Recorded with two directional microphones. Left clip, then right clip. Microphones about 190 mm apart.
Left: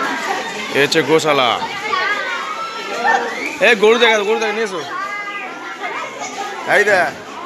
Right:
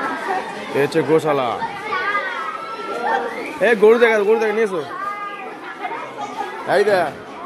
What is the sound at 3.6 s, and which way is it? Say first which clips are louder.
A man's voice: left 1 dB; 25° right (ahead or behind).